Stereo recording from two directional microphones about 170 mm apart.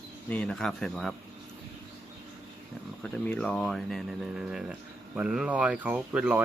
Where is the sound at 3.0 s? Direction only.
5° left (ahead or behind).